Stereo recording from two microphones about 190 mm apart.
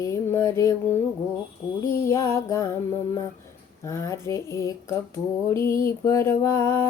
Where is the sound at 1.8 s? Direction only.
15° left (ahead or behind).